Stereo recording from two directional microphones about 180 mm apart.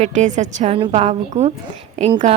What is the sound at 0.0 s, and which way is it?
A woman's voice, 40° right (ahead or behind).